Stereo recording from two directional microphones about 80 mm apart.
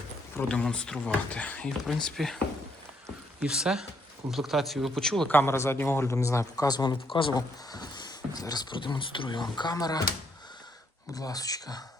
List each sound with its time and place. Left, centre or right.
0.3 s speech: centre
1.8 s speech: centre
3.4 s speech: centre
5.3 s speech: left
7.1 s speech: left
7.3 s speech: left
9.7 s speech: left
11.1 s speech: left